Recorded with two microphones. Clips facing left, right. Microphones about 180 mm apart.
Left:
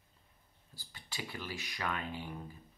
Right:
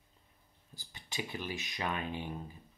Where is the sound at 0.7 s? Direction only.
20° right (ahead or behind).